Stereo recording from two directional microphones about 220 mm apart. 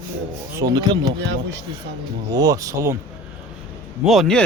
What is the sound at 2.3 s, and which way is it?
Speech, 15° right (ahead or behind).